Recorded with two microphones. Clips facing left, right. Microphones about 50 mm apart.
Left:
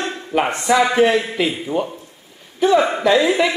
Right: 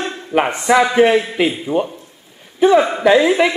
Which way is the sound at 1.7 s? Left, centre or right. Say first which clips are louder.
Right 3 dB; centre.